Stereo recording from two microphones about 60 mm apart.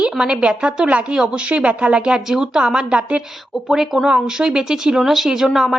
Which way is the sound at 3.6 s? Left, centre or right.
Centre.